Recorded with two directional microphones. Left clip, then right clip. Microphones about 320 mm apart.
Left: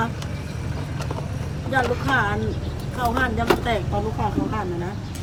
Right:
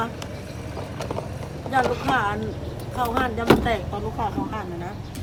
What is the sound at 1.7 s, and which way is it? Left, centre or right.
Speech, right.